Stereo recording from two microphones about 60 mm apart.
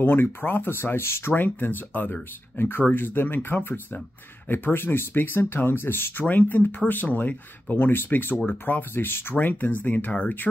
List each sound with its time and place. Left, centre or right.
0.0 s speech: left